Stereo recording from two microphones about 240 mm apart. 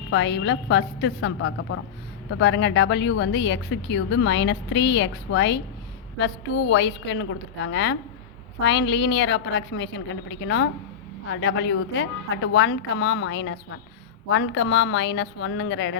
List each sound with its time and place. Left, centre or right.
0.1 s speech: left